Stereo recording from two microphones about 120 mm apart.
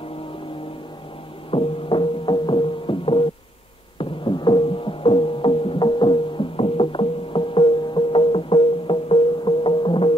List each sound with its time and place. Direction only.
1.5 s music: 50° left (ahead or behind)